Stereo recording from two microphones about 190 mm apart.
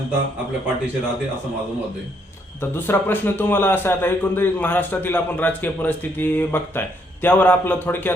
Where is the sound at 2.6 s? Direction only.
10° left (ahead or behind).